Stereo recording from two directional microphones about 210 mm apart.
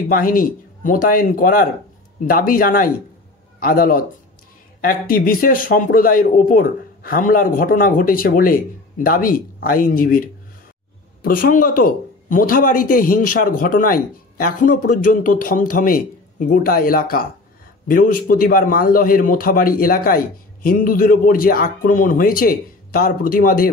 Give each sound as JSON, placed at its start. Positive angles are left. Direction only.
{"t": 0.1, "sound": "a man's voice", "side_deg": 40}